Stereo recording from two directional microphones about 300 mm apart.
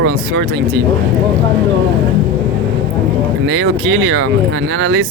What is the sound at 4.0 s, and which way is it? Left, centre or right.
Speech, right.